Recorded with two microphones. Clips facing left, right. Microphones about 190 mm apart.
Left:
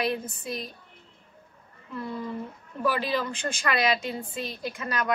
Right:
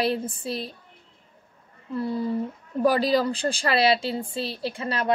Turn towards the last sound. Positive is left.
turn(degrees=-30)  # may be behind; listen again after turning